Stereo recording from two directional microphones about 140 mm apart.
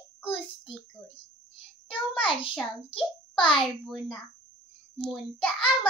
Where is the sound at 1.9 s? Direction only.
40° left (ahead or behind).